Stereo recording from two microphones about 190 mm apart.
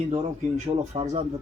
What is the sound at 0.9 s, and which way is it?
Speech, 30° right (ahead or behind).